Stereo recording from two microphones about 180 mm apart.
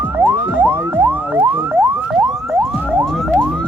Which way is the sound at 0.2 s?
10° right (ahead or behind).